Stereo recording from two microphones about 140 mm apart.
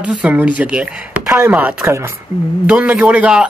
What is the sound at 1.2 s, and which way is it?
Chop, 20° right (ahead or behind).